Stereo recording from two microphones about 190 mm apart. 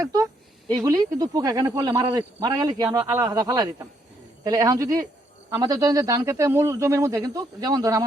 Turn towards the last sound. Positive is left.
turn(degrees=-20)  # may be behind; listen again after turning